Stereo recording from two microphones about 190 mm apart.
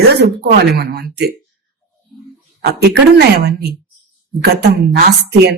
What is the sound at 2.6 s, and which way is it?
Speech, 60° right (ahead or behind).